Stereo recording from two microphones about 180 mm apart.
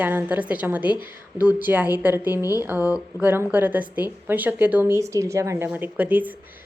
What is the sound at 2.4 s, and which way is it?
Speech, 20° left (ahead or behind).